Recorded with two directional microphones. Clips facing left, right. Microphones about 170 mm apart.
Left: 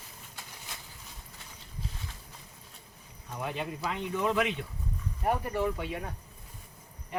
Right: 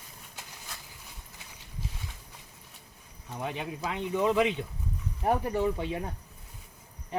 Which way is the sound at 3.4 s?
15° right (ahead or behind).